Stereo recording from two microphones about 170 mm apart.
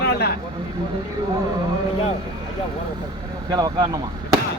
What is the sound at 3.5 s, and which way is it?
Speech, 25° right (ahead or behind).